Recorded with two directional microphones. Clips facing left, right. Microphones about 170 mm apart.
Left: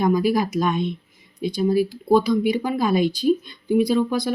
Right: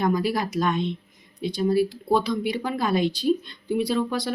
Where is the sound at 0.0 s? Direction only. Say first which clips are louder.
Left 4 dB; 10° left (ahead or behind).